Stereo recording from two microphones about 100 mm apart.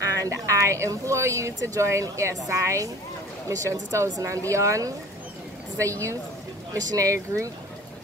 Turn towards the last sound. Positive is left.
turn(degrees=-30)  # may be behind; listen again after turning